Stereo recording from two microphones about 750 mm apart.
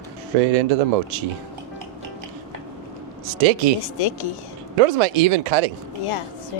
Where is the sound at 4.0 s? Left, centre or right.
Left.